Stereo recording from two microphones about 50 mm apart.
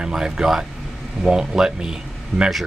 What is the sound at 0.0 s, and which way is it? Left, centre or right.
Speech, centre.